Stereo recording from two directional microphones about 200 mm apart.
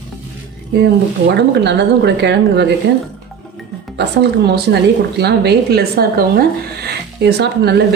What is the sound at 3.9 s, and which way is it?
A woman's voice, 55° right (ahead or behind).